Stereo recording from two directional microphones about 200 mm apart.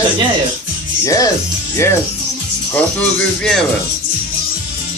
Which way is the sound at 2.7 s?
5° left (ahead or behind).